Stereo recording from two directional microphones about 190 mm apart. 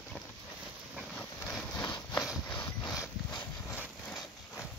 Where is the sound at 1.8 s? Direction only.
20° left (ahead or behind).